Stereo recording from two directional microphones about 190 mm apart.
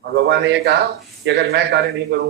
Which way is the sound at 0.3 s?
60° right (ahead or behind).